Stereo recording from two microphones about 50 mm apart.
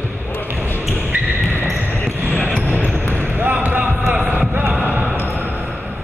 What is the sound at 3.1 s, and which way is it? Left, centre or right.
Basketball bounce, right.